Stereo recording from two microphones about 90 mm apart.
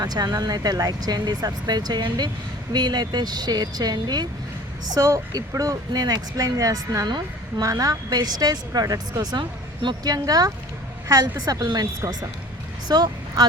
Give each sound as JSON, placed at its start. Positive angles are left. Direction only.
{"t": 0.0, "sound": "speech", "side_deg": -50}
{"t": 4.9, "sound": "speech", "side_deg": -35}
{"t": 12.9, "sound": "speech", "side_deg": -50}